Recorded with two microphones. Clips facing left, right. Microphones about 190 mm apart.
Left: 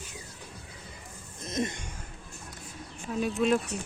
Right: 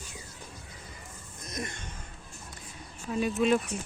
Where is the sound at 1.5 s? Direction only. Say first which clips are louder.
Left 7 dB; 25° left (ahead or behind).